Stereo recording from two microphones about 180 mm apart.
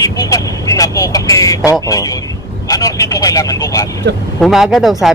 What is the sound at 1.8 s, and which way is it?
Speech, 20° left (ahead or behind).